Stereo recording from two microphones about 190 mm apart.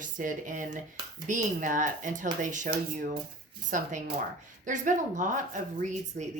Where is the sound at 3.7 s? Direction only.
40° right (ahead or behind).